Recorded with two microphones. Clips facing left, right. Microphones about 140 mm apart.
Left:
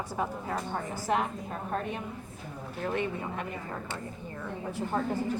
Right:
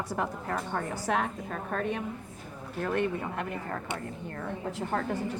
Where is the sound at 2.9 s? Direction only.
60° right (ahead or behind).